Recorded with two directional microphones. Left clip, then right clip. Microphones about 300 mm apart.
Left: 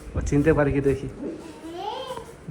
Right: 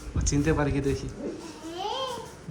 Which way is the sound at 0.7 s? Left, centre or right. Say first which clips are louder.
Left 6 dB; right.